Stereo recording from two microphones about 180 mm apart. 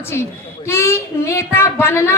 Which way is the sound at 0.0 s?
15° left (ahead or behind).